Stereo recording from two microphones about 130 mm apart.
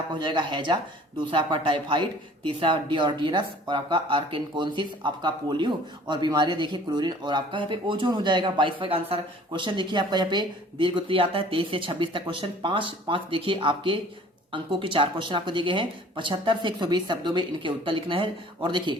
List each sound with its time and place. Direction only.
0.1 s speech: 35° right (ahead or behind)